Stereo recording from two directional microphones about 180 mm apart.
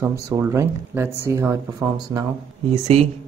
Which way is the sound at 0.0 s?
15° right (ahead or behind).